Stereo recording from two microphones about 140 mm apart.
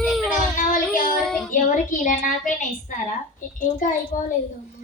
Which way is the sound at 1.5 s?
65° left (ahead or behind).